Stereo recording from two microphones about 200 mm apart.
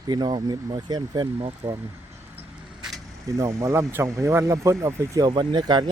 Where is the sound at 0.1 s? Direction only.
20° right (ahead or behind).